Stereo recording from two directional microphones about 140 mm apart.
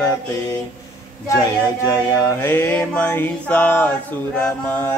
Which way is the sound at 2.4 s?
15° left (ahead or behind).